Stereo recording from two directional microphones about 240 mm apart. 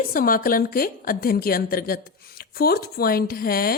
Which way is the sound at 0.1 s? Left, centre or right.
Left.